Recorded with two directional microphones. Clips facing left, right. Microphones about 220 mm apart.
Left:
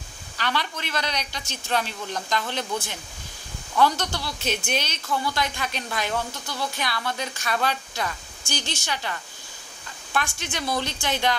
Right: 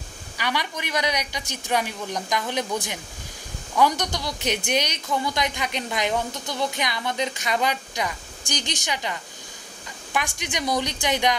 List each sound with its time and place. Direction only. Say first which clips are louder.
0.4 s a woman's voice: even; 15° right (ahead or behind)